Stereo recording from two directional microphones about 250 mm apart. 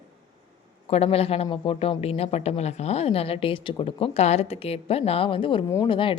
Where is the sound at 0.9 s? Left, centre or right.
Left.